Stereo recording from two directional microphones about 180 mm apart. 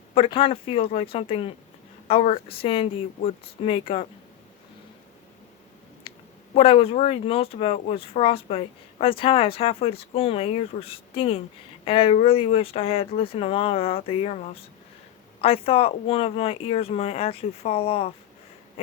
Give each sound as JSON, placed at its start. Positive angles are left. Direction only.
{"t": 0.1, "sound": "speech", "side_deg": 30}
{"t": 6.1, "sound": "speech", "side_deg": 30}